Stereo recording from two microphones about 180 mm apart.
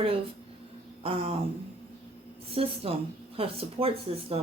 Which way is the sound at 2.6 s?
30° right (ahead or behind).